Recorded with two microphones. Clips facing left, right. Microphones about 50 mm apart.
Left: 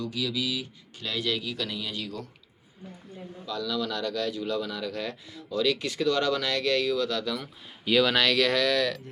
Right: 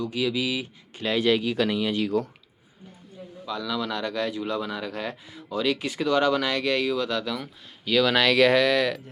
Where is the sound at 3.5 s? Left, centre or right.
Centre.